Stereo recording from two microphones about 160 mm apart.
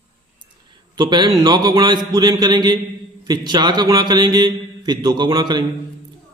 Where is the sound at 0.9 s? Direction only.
25° right (ahead or behind).